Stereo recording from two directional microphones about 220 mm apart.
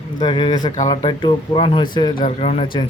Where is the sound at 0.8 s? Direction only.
20° left (ahead or behind).